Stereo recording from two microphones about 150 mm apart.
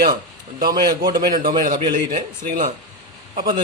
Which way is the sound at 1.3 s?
65° right (ahead or behind).